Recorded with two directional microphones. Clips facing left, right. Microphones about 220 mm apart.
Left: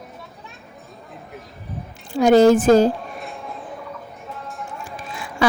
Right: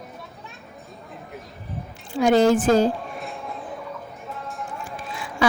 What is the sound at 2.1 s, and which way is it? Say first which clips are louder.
Speech: left 4 dB; 40° left (ahead or behind).